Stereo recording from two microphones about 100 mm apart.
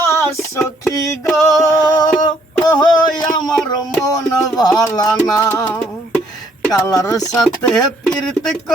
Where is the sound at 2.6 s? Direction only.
45° left (ahead or behind).